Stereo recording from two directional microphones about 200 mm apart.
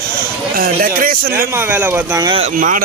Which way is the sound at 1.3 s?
10° right (ahead or behind).